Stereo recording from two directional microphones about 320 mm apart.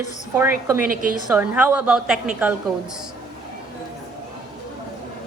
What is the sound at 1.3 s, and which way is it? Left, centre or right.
A woman's voice, centre.